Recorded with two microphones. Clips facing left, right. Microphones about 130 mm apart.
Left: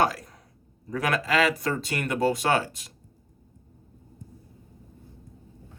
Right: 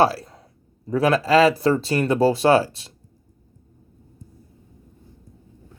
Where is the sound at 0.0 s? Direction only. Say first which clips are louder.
Right 6 dB; 35° right (ahead or behind).